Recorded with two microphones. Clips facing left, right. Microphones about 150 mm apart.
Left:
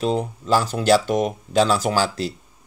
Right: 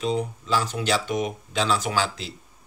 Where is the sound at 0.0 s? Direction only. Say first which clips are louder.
Left 3 dB; 45° left (ahead or behind).